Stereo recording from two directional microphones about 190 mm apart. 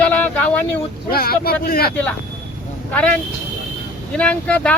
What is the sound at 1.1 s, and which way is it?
Speech, 55° left (ahead or behind).